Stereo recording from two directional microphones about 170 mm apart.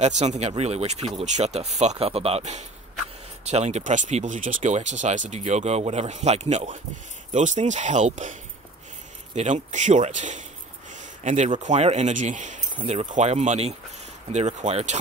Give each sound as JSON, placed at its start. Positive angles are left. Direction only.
{"t": 0.0, "sound": "speech", "side_deg": -40}